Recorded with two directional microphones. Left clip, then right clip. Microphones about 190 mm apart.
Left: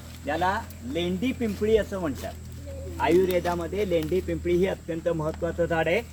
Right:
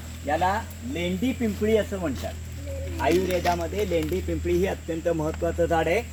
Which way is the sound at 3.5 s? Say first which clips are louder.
Right 1 dB; 30° right (ahead or behind).